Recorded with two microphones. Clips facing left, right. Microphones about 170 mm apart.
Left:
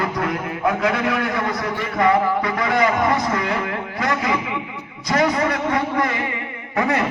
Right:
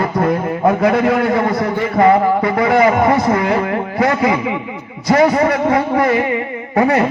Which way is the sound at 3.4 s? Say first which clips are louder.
Right 7 dB; 45° right (ahead or behind).